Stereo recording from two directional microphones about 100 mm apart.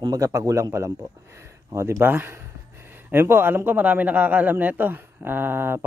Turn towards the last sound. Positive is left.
turn(degrees=-20)  # may be behind; listen again after turning